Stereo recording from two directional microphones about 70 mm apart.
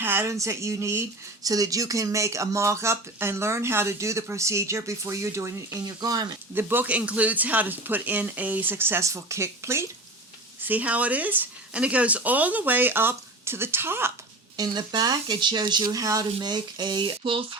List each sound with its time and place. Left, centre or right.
0.0 s a sound: right
0.3 s speech: right
1.5 s speech: right
6.0 s speech: right
6.5 s speech: right
6.8 s speech: centre
9.0 s speech: right
10.6 s speech: right
14.5 s speech: right